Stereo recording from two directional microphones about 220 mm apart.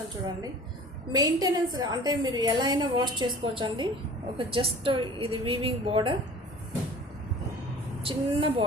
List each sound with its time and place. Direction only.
1.1 s a woman's voice: 20° right (ahead or behind)
8.0 s a woman's voice: 25° right (ahead or behind)